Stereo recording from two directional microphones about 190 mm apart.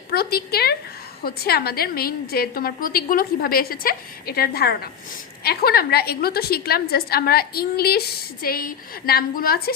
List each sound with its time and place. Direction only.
0.1 s a woman's voice: 55° left (ahead or behind)